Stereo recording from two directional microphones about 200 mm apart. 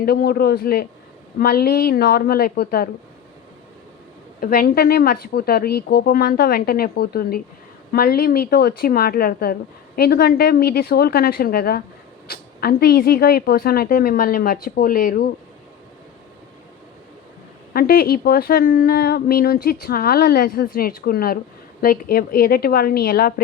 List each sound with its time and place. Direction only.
0.0 s a woman's voice: 50° left (ahead or behind)
4.4 s a woman's voice: 45° left (ahead or behind)
17.7 s a woman's voice: 50° left (ahead or behind)